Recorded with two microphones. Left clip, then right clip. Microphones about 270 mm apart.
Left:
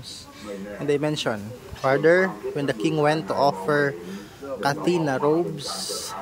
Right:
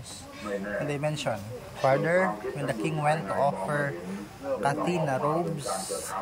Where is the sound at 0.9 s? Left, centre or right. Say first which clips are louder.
Left 11 dB; centre.